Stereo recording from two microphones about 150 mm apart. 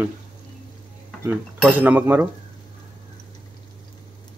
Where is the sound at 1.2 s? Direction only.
10° right (ahead or behind).